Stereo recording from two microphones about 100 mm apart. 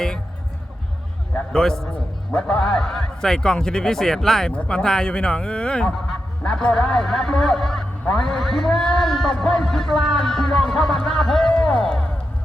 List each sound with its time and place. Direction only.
1.5 s a man's voice: 5° left (ahead or behind)